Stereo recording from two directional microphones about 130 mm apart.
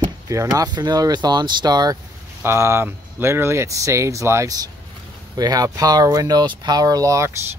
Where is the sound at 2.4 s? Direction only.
20° right (ahead or behind).